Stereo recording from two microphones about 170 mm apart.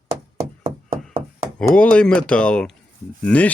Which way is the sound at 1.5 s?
5° left (ahead or behind).